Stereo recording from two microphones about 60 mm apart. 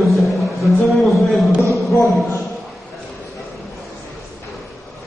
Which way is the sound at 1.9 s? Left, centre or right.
Left.